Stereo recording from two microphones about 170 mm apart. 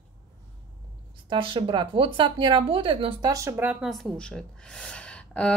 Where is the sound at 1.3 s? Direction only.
30° right (ahead or behind).